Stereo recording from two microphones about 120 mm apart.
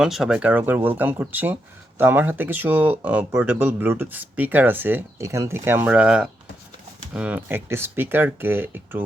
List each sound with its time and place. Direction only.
0.0 s speech: 5° right (ahead or behind)